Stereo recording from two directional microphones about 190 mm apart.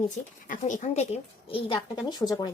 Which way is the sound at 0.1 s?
40° left (ahead or behind).